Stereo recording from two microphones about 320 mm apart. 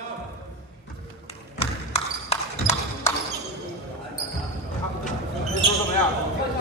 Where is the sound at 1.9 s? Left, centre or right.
Centre.